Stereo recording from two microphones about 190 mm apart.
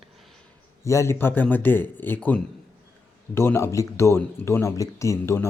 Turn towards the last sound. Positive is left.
turn(degrees=15)  # may be behind; listen again after turning